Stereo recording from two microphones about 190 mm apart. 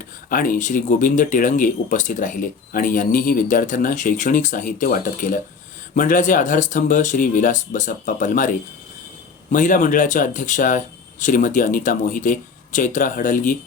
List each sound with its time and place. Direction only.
0.3 s speech: 45° left (ahead or behind)
9.5 s speech: 45° left (ahead or behind)